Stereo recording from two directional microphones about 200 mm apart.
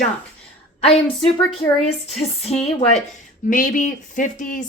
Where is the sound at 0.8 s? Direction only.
30° left (ahead or behind).